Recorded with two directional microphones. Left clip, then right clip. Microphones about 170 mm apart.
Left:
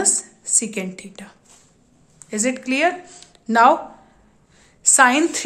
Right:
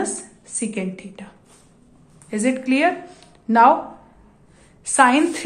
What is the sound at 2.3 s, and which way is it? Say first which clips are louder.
Speech: right 1 dB; 25° left (ahead or behind).